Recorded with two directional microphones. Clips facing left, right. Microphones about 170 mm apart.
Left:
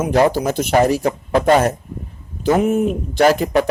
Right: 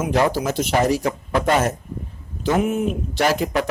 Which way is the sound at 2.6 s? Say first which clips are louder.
Left 5 dB; 45° left (ahead or behind).